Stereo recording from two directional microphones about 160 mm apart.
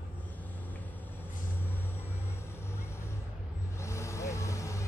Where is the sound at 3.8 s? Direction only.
15° left (ahead or behind).